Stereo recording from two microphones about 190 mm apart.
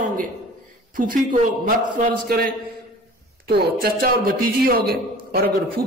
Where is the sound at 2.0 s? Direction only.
50° right (ahead or behind).